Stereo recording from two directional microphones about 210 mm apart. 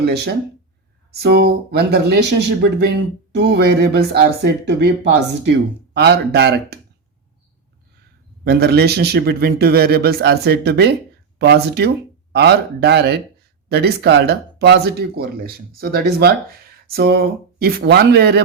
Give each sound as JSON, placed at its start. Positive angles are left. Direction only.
{"t": 0.0, "sound": "speech", "side_deg": -50}
{"t": 8.4, "sound": "speech", "side_deg": -50}